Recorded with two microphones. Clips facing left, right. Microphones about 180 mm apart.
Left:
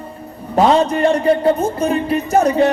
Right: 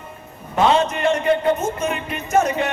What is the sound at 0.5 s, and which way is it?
Speech, 35° left (ahead or behind).